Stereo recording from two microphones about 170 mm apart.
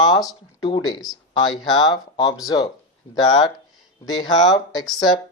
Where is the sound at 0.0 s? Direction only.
20° left (ahead or behind).